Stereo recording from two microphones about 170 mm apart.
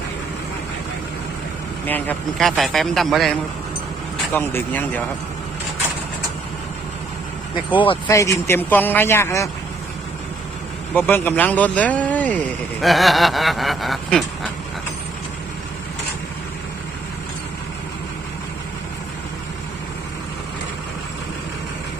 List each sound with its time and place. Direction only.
1.9 s a man's voice: 10° left (ahead or behind)
4.4 s speech: 10° left (ahead or behind)
7.7 s speech: 30° left (ahead or behind)
8.0 s speech: 20° left (ahead or behind)
10.9 s speech: 10° left (ahead or behind)